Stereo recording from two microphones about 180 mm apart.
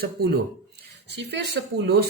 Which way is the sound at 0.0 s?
60° right (ahead or behind).